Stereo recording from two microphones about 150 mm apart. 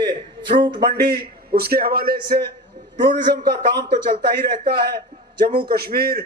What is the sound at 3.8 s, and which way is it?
A man's voice, 90° right.